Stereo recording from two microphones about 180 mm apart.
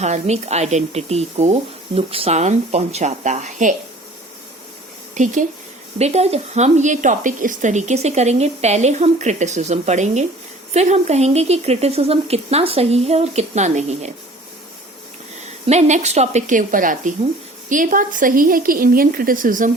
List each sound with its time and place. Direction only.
0.0 s a woman's voice: 40° right (ahead or behind)
5.1 s a woman's voice: 45° right (ahead or behind)
15.6 s a woman's voice: 40° right (ahead or behind)